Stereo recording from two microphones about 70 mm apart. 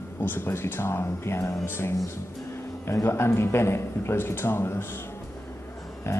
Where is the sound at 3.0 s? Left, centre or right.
Left.